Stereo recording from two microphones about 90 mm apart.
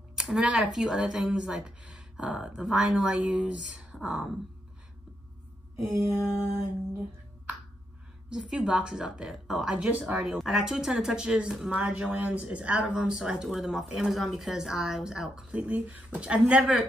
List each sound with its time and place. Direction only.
0.1 s speech: 5° right (ahead or behind)
5.8 s mantra: 25° right (ahead or behind)
8.3 s speech: 10° right (ahead or behind)
10.1 s speech: 5° right (ahead or behind)